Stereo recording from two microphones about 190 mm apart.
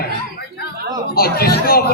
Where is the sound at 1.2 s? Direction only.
55° left (ahead or behind).